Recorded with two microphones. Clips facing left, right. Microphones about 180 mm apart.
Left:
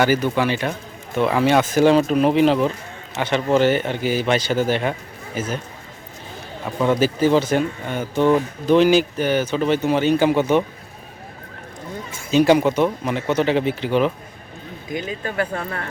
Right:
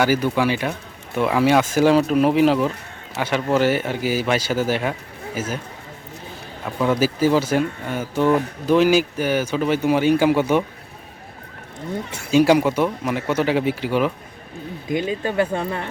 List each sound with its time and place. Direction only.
0.0 s speech: 10° right (ahead or behind)
6.7 s speech: 5° right (ahead or behind)
12.3 s speech: 10° right (ahead or behind)
14.9 s speech: 25° right (ahead or behind)